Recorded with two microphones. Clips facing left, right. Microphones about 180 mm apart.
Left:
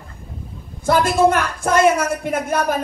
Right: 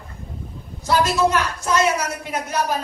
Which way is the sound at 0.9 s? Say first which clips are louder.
Left 3 dB; 50° left (ahead or behind).